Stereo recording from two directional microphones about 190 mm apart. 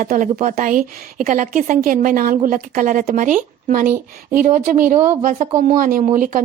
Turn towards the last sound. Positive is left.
turn(degrees=-45)  # may be behind; listen again after turning